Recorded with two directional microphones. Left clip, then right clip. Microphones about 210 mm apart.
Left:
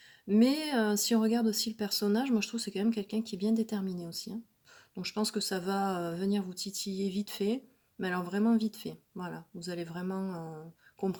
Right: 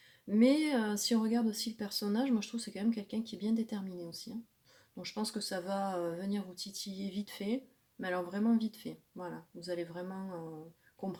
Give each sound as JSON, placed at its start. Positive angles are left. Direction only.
{"t": 0.3, "sound": "speech", "side_deg": 45}